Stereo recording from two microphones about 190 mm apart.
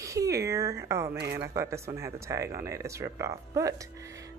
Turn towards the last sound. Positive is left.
turn(degrees=-15)  # may be behind; listen again after turning